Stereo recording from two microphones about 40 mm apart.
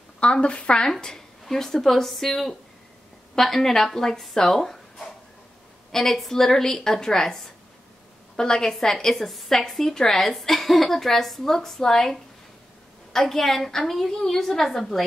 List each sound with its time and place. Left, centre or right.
0.2 s a woman's voice: left
0.8 s a woman's voice: centre
8.7 s a woman's voice: centre